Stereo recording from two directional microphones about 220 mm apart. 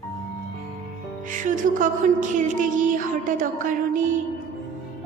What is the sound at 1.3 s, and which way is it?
Music, 35° right (ahead or behind).